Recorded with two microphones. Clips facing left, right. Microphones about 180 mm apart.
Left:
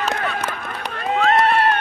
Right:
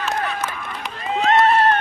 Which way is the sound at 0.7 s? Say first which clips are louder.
Left 5 dB; 65° left (ahead or behind).